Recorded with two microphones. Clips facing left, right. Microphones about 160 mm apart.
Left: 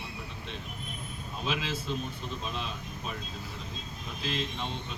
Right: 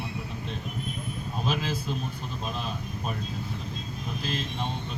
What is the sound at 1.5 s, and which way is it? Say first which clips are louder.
Speech: right 3 dB; 40° right (ahead or behind).